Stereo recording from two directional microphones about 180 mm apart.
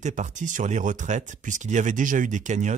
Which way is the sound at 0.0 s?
40° right (ahead or behind).